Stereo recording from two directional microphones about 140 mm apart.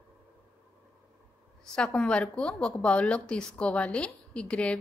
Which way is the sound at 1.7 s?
5° left (ahead or behind).